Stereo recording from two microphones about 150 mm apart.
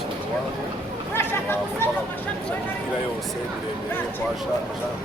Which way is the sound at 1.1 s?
15° left (ahead or behind).